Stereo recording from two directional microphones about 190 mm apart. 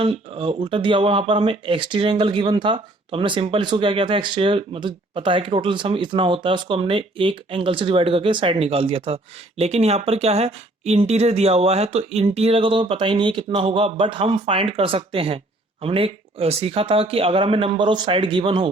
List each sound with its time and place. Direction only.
0.0 s speech: 30° right (ahead or behind)